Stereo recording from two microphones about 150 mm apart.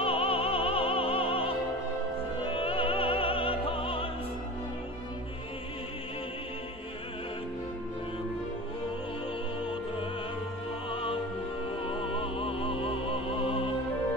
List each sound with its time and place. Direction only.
0.0 s music: 40° left (ahead or behind)
2.4 s opera: 35° left (ahead or behind)
10.9 s music: 35° left (ahead or behind)